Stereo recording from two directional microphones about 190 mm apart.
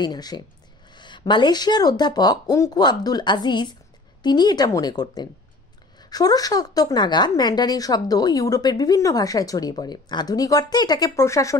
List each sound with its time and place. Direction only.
0.0 s a woman's voice: 20° left (ahead or behind)